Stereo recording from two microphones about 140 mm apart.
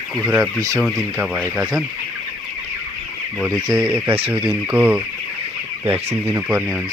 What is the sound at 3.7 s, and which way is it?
Speech, 10° right (ahead or behind).